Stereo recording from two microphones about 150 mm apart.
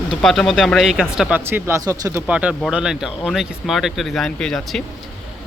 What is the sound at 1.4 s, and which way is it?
Speech, 15° right (ahead or behind).